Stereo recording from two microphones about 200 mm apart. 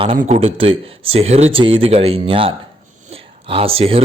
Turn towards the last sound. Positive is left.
turn(degrees=-30)  # may be behind; listen again after turning